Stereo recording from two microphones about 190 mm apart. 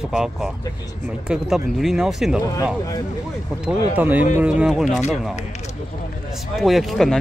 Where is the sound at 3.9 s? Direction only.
10° right (ahead or behind).